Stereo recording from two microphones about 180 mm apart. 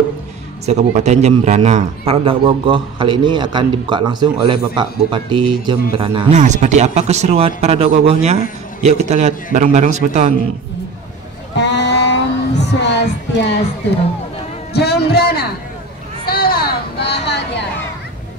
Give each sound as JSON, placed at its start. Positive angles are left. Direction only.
{"t": 0.7, "sound": "a man's voice", "side_deg": -40}
{"t": 6.3, "sound": "speech", "side_deg": -40}
{"t": 11.5, "sound": "a sound", "side_deg": 75}
{"t": 12.8, "sound": "music", "side_deg": 75}
{"t": 14.7, "sound": "speech", "side_deg": 65}
{"t": 16.3, "sound": "a sound", "side_deg": 55}